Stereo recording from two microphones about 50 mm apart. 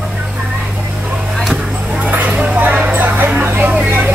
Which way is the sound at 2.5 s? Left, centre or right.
Right.